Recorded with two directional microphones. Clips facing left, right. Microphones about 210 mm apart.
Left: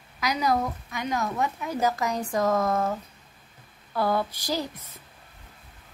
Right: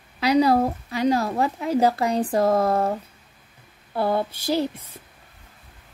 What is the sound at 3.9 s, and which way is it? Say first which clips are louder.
Speech: right 2 dB; 30° right (ahead or behind).